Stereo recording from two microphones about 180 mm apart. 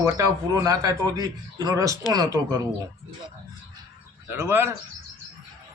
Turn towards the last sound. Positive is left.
turn(degrees=-15)  # may be behind; listen again after turning